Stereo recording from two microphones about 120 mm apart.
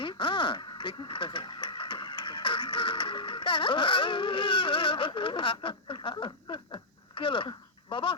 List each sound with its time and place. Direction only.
0.0 s speech: 40° left (ahead or behind)